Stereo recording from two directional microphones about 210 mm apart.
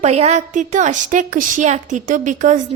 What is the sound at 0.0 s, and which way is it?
A woman's voice, 30° right (ahead or behind).